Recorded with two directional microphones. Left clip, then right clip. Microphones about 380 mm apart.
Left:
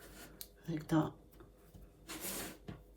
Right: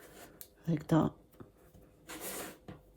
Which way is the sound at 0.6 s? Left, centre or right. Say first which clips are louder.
Right 4 dB; right.